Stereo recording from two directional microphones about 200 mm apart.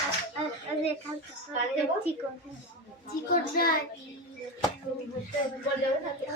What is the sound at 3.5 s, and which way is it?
Speech, 45° left (ahead or behind).